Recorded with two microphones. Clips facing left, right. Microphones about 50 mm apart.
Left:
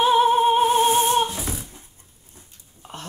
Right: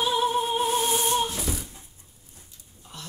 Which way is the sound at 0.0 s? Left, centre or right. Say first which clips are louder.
Left 8 dB; left.